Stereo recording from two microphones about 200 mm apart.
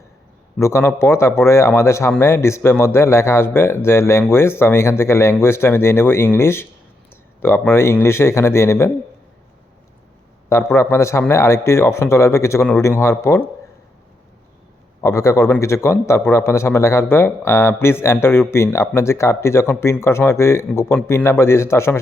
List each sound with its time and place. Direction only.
0.6 s speech: 15° left (ahead or behind)
10.5 s speech: 10° left (ahead or behind)
15.0 s speech: 15° left (ahead or behind)